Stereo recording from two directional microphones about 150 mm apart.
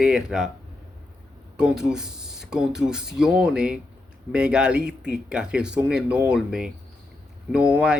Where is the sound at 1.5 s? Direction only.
5° right (ahead or behind).